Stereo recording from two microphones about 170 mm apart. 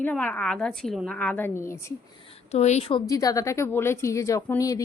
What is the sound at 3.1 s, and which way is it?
Speech, 20° left (ahead or behind).